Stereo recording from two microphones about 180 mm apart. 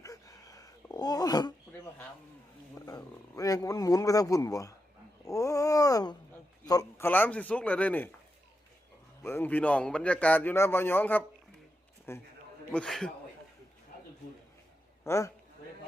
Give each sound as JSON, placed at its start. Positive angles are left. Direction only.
{"t": 0.0, "sound": "a sound", "side_deg": 20}
{"t": 5.2, "sound": "dog", "side_deg": 20}
{"t": 6.7, "sound": "a sound", "side_deg": 15}
{"t": 9.2, "sound": "a man's voice", "side_deg": 10}
{"t": 12.7, "sound": "a man's voice", "side_deg": 5}
{"t": 15.0, "sound": "a man's voice", "side_deg": 15}